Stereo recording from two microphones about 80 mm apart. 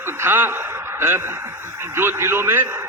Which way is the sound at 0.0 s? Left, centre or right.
Right.